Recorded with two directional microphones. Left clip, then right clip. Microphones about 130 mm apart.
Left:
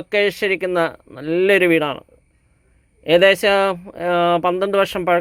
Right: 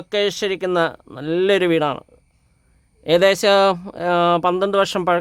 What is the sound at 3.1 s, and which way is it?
Speech, 15° right (ahead or behind).